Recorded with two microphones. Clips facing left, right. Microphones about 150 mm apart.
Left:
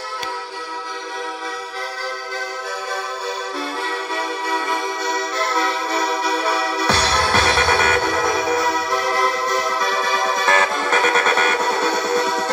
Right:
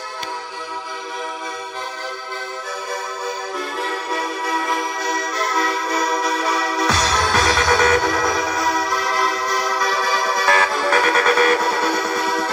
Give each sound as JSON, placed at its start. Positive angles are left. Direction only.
{"t": 4.5, "sound": "music", "side_deg": 30}